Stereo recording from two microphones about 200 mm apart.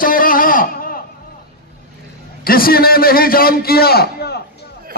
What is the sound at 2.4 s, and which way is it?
A man's voice, 50° left (ahead or behind).